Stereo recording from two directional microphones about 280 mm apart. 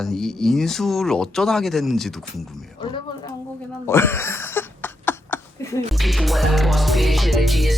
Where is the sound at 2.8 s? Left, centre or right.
Centre.